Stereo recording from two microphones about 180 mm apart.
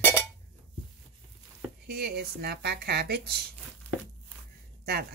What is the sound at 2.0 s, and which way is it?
Speech, 60° right (ahead or behind).